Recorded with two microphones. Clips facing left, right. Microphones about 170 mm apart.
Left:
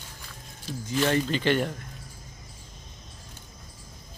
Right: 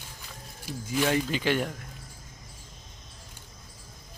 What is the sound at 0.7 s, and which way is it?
Speech, 10° right (ahead or behind).